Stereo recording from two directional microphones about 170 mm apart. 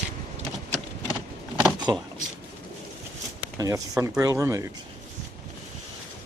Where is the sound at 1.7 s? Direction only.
25° right (ahead or behind).